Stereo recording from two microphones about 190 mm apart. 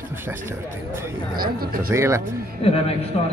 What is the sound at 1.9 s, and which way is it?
Speech, 15° right (ahead or behind).